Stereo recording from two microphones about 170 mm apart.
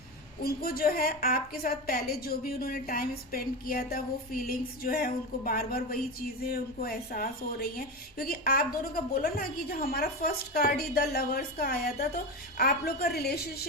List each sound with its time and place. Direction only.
0.4 s a woman's voice: 60° left (ahead or behind)